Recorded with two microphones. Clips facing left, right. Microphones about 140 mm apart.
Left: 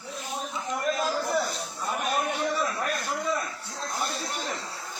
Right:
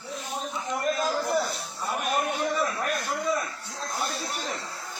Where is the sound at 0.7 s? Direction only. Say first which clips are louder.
Right 1 dB; centre (ahead or behind).